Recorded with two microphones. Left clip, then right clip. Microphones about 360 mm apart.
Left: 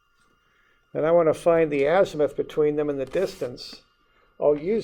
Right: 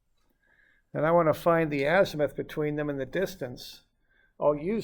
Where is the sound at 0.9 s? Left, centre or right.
Right.